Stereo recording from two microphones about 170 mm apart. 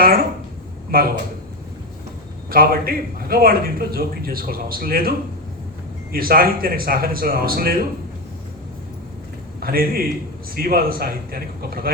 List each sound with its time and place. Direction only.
0.9 s speech: 60° right (ahead or behind)
2.5 s a man's voice: 60° right (ahead or behind)
9.6 s a man's voice: 60° right (ahead or behind)